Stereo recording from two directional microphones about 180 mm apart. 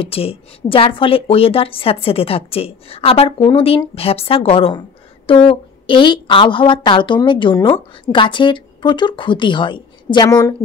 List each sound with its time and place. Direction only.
0.0 s a woman's voice: 30° left (ahead or behind)